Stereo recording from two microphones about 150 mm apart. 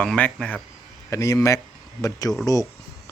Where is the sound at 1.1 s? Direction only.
20° left (ahead or behind).